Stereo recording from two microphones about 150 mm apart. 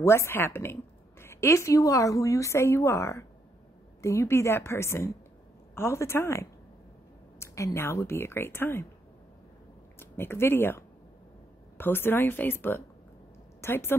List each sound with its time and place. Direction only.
0.0 s speech: 15° left (ahead or behind)
9.9 s speech: 15° left (ahead or behind)
11.8 s a woman's voice: 15° left (ahead or behind)